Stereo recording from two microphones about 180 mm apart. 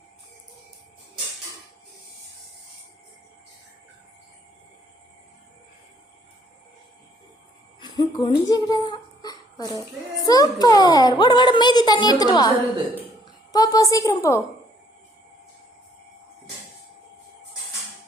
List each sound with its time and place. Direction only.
7.8 s a child's voice: 25° left (ahead or behind)